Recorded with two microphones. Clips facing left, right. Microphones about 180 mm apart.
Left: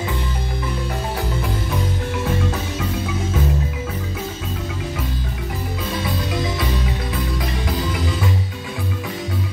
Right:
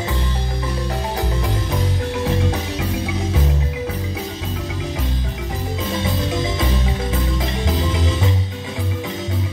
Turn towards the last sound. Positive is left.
turn(degrees=-25)  # may be behind; listen again after turning